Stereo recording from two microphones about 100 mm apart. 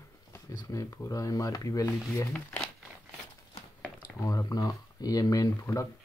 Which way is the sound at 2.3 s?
15° left (ahead or behind).